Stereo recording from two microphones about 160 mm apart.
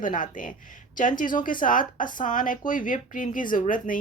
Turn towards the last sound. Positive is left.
turn(degrees=55)  # may be behind; listen again after turning